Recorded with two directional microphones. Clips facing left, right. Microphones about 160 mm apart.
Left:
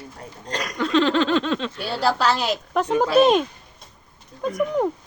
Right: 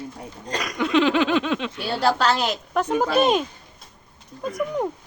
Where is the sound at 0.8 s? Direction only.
15° right (ahead or behind).